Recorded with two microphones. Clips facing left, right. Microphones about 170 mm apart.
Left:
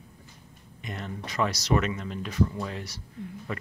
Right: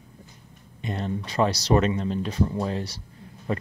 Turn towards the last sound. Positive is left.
turn(degrees=-30)  # may be behind; listen again after turning